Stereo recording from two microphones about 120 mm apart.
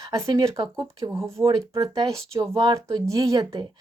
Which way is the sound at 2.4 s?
35° right (ahead or behind).